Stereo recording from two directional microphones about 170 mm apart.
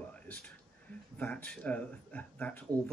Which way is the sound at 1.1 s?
10° left (ahead or behind).